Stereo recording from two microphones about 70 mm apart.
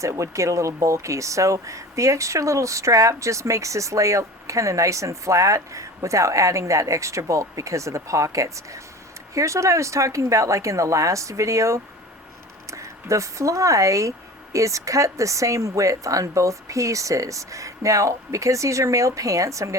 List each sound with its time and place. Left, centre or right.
0.0 s speech: right